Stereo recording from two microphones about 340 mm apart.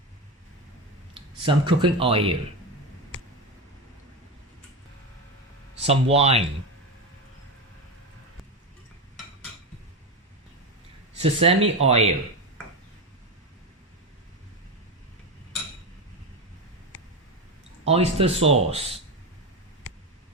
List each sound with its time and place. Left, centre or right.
1.1 s speech: centre
5.8 s speech: centre
11.2 s speech: centre
17.8 s speech: centre